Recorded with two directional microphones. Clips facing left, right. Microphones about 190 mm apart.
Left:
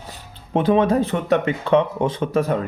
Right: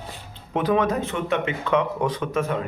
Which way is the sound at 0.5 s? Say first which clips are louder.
Left 5 dB; 30° left (ahead or behind).